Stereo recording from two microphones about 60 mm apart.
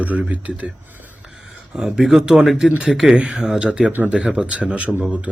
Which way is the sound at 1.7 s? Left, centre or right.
Centre.